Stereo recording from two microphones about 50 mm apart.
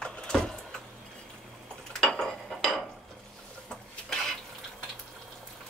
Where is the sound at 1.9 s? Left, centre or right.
Centre.